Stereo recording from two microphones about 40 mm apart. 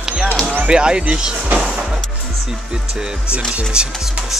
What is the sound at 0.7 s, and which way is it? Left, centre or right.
Speech, right.